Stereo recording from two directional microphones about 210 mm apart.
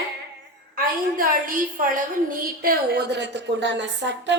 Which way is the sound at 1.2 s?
40° right (ahead or behind).